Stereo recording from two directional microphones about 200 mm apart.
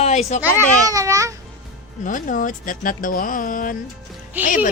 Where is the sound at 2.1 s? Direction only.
40° left (ahead or behind).